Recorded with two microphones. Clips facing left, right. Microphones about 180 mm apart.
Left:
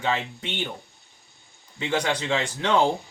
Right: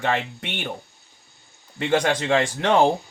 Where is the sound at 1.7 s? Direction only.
55° right (ahead or behind).